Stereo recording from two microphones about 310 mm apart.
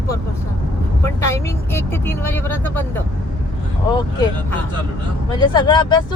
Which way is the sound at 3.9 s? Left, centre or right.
Centre.